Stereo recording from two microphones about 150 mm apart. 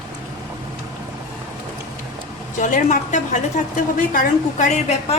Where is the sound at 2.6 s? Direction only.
60° left (ahead or behind).